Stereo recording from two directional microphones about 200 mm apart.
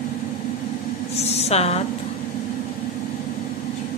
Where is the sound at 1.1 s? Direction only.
30° left (ahead or behind).